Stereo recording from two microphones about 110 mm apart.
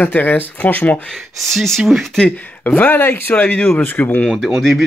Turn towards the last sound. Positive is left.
turn(degrees=0)  # may be behind; listen again after turning